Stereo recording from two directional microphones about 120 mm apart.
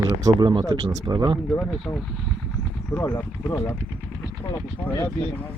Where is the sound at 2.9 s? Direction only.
20° left (ahead or behind).